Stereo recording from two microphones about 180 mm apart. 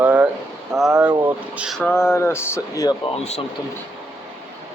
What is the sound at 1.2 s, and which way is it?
Speech, 5° right (ahead or behind).